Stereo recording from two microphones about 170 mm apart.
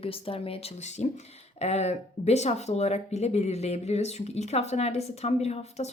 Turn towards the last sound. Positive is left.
turn(degrees=40)  # may be behind; listen again after turning